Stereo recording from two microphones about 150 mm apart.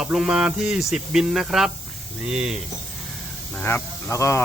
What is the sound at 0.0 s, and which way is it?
Speech, 5° right (ahead or behind).